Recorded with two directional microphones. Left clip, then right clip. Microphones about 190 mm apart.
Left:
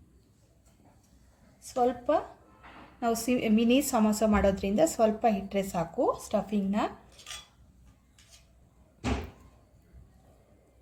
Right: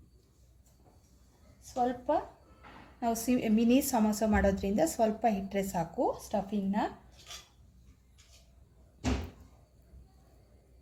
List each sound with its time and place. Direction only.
1.7 s a woman's voice: 30° left (ahead or behind)
3.0 s a woman's voice: 15° left (ahead or behind)